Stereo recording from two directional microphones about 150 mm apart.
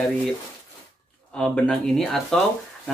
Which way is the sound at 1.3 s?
5° left (ahead or behind).